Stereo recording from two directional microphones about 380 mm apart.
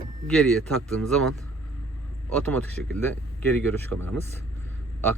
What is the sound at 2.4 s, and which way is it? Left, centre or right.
Speech, centre.